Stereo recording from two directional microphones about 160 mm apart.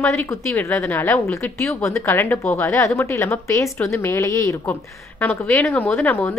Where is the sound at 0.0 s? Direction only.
15° left (ahead or behind).